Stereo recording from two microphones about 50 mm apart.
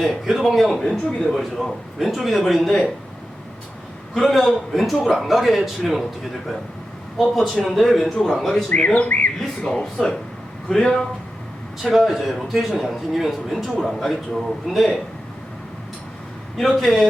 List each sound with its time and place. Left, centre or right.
0.0 s a man's voice: centre
4.1 s a man's voice: centre
7.2 s a man's voice: centre
8.7 s speech: left
10.7 s a man's voice: centre
16.7 s a man's voice: centre